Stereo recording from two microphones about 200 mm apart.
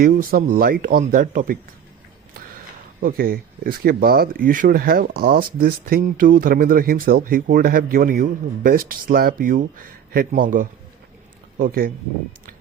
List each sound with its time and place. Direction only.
0.0 s speech: 45° right (ahead or behind)
3.0 s speech: 50° right (ahead or behind)